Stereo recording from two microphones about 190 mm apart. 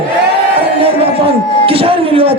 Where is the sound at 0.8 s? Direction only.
30° right (ahead or behind).